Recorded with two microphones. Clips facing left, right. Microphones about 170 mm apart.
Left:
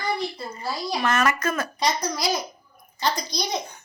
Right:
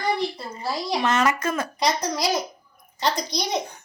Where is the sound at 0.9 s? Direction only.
20° right (ahead or behind).